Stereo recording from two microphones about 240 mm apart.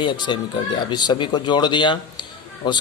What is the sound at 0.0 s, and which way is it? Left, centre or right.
Speech, centre.